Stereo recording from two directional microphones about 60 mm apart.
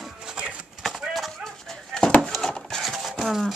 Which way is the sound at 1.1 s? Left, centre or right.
Centre.